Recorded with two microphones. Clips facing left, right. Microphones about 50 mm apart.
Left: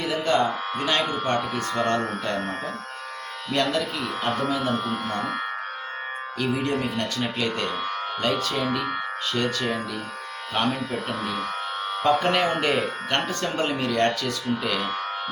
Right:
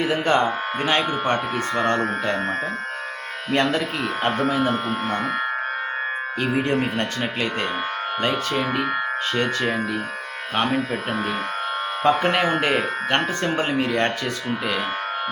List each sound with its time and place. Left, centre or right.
0.0 s speech: right
0.9 s speech: right
12.0 s speech: right